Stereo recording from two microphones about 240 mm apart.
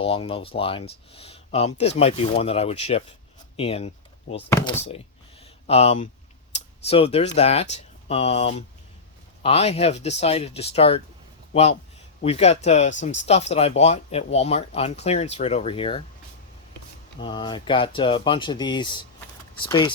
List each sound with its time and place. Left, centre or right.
0.0 s speech: left
4.4 s speech: centre
5.4 s a sound: left
7.3 s speech: left
12.2 s speech: left
17.2 s speech: centre